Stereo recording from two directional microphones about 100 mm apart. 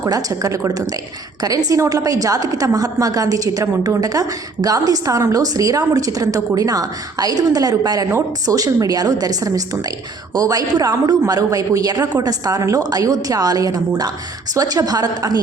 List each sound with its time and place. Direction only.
0.0 s a woman's voice: 35° right (ahead or behind)